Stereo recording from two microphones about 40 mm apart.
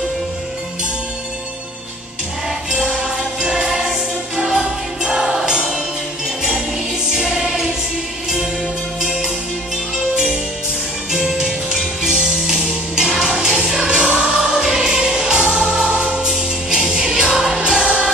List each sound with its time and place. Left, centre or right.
2.7 s music: right
7.2 s choir: centre
9.0 s music: centre
11.1 s music: centre